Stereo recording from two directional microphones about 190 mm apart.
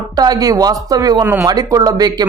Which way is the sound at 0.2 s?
20° right (ahead or behind).